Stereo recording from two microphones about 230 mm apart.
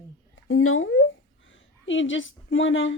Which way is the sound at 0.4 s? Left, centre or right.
Left.